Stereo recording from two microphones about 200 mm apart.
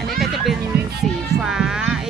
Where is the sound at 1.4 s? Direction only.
5° right (ahead or behind).